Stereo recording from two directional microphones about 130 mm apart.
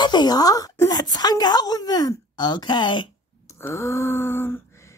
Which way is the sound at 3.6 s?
20° left (ahead or behind).